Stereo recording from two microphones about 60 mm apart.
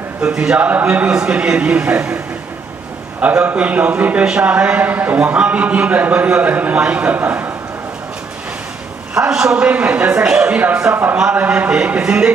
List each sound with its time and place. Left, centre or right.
0.3 s a man's voice: centre
0.6 s a man's voice: right
1.1 s a man's voice: centre
3.2 s a man's voice: right
9.1 s a man's voice: centre
9.6 s a man's voice: right